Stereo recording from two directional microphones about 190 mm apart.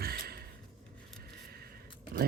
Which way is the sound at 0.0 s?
55° right (ahead or behind).